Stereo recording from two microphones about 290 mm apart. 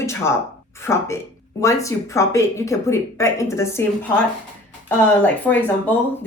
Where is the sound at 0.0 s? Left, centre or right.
Centre.